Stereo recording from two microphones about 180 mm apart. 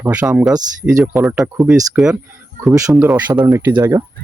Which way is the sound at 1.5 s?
15° right (ahead or behind).